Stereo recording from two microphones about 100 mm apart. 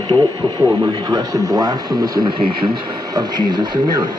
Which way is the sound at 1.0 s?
40° right (ahead or behind).